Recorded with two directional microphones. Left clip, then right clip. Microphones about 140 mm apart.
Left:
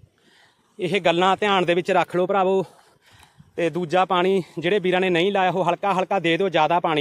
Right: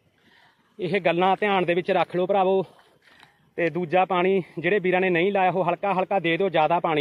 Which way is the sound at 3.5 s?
30° left (ahead or behind).